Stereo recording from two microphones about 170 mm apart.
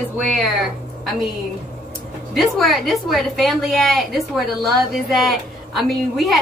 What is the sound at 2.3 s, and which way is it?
A woman's voice, centre (ahead or behind).